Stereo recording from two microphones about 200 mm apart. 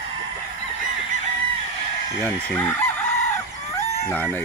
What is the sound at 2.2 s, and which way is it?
Speech, 10° left (ahead or behind).